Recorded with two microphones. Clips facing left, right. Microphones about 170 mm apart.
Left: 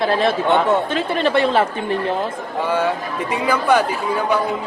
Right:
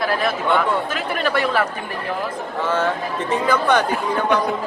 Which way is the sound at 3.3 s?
10° left (ahead or behind).